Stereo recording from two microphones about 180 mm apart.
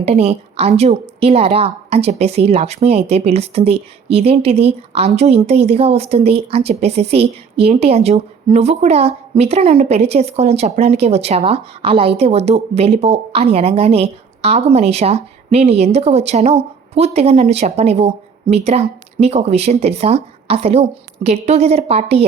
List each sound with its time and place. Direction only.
0.0 s a woman's voice: 35° right (ahead or behind)